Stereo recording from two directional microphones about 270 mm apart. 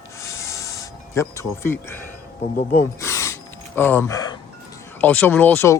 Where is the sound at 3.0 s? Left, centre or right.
Centre.